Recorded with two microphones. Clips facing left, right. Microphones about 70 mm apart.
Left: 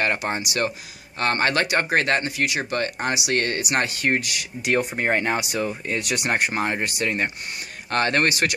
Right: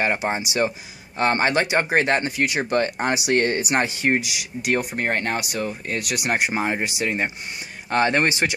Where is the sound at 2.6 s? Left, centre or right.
Right.